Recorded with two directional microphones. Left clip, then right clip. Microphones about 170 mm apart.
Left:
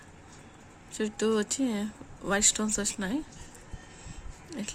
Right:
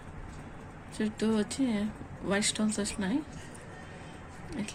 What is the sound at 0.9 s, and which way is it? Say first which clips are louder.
Speech: left 3 dB; 65° left (ahead or behind).